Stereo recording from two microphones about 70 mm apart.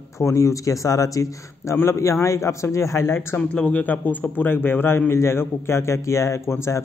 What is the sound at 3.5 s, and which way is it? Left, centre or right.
A man's voice, centre.